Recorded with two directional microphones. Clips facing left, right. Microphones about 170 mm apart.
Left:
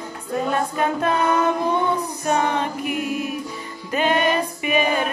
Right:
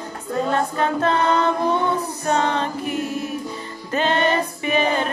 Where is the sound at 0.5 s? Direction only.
15° left (ahead or behind).